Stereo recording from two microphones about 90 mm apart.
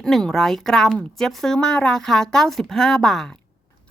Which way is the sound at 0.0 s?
5° left (ahead or behind).